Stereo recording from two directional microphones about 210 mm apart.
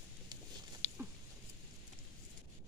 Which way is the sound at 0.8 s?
35° left (ahead or behind).